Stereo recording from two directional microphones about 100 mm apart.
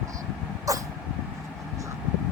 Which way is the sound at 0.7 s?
35° right (ahead or behind).